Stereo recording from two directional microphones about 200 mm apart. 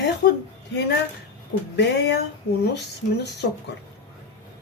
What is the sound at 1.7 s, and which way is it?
Speech, 60° left (ahead or behind).